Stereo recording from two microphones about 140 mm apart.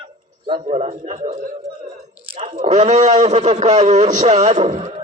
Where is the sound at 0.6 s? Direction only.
50° right (ahead or behind).